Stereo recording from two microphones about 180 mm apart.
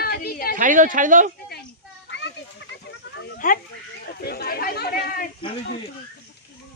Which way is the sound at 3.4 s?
50° left (ahead or behind).